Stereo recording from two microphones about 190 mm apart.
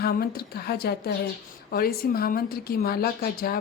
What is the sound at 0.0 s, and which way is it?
A woman's voice, 55° left (ahead or behind).